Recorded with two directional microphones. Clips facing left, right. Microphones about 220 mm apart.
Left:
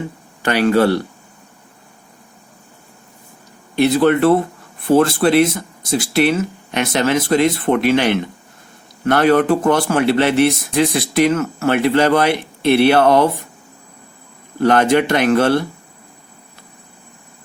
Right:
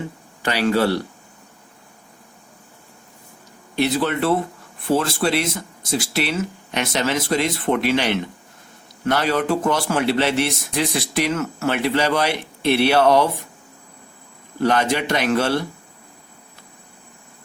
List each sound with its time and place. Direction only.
0.4 s speech: 55° left (ahead or behind)
3.8 s speech: 55° left (ahead or behind)
14.6 s speech: 55° left (ahead or behind)